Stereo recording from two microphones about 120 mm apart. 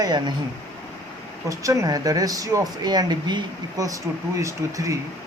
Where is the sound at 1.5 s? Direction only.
25° right (ahead or behind).